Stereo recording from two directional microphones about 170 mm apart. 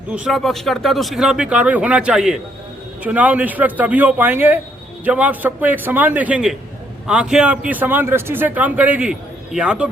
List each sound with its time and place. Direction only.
0.1 s a man's voice: 5° right (ahead or behind)